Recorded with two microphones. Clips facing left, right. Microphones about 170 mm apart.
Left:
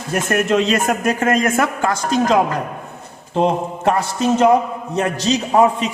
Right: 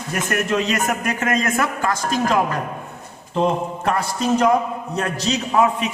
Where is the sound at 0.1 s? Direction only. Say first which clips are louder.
Left 5 dB; 30° left (ahead or behind).